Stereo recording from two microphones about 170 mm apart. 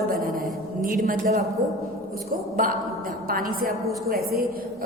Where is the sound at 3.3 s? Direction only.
55° right (ahead or behind).